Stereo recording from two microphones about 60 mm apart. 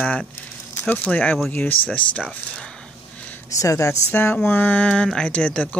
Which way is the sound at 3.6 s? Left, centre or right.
Left.